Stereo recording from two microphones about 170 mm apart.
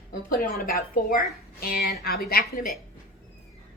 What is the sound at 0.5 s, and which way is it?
A woman's voice, 60° left (ahead or behind).